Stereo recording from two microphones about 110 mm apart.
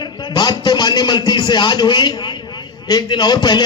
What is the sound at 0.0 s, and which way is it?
A man's voice, 40° left (ahead or behind).